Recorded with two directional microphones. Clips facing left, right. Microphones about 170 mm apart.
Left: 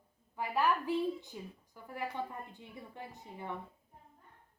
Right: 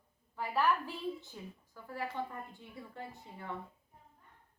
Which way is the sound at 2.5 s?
20° left (ahead or behind).